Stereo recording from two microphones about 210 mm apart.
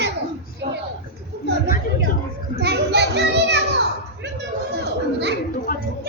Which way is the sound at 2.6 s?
50° right (ahead or behind).